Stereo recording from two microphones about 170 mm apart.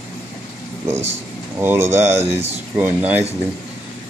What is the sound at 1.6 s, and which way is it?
Speech, 15° right (ahead or behind).